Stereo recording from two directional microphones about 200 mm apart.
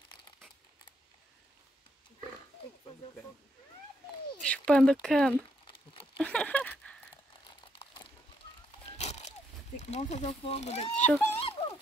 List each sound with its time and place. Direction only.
4.4 s speech: 5° left (ahead or behind)
6.1 s a sound: 5° left (ahead or behind)
7.8 s a sound: 25° left (ahead or behind)
9.8 s speech: 35° left (ahead or behind)
11.0 s speech: 5° left (ahead or behind)
11.2 s speech: 30° left (ahead or behind)